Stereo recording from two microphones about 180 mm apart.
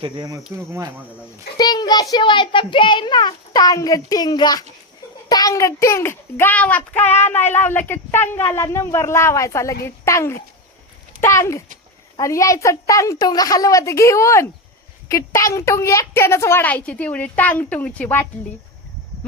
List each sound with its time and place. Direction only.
0.0 s speech: 25° right (ahead or behind)
1.5 s a child's voice: 20° left (ahead or behind)